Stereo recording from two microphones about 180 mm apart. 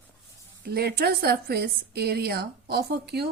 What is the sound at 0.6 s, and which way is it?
A woman's voice, 60° right (ahead or behind).